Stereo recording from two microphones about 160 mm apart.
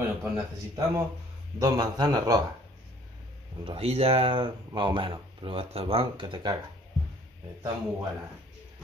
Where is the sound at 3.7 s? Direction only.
40° right (ahead or behind).